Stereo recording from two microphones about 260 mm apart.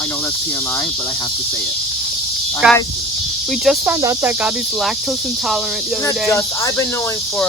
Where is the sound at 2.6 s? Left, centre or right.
Centre.